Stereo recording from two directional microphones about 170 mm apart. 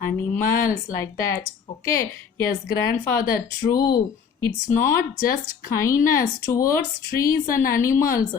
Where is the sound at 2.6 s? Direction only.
70° left (ahead or behind).